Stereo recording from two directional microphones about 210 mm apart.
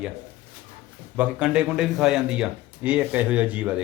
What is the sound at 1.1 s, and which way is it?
Speech, 5° right (ahead or behind).